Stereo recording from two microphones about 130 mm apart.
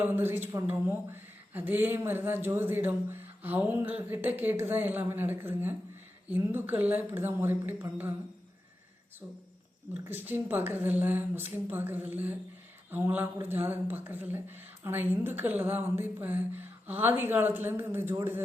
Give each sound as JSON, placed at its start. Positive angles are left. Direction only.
{"t": 0.0, "sound": "speech", "side_deg": -15}
{"t": 10.0, "sound": "speech", "side_deg": -15}